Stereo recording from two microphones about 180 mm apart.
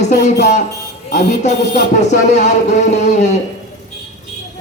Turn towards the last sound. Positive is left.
turn(degrees=40)  # may be behind; listen again after turning